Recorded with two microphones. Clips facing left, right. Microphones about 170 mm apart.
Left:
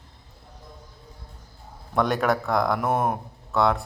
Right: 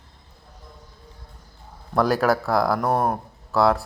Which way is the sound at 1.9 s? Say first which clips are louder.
Right 3 dB; centre (ahead or behind).